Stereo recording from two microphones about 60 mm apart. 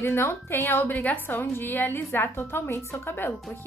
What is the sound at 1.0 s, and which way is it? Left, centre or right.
A woman's voice, left.